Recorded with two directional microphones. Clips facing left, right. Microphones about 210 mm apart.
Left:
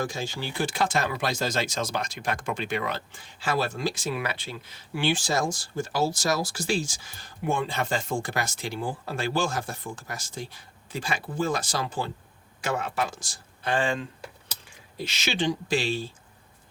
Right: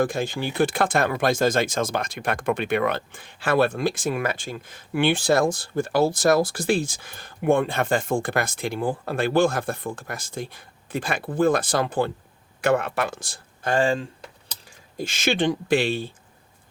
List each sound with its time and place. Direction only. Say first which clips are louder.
0.0 s speech: right 7 dB; 55° right (ahead or behind)
13.7 s speech: right 5 dB; 35° right (ahead or behind)
14.9 s speech: right 6 dB; 50° right (ahead or behind)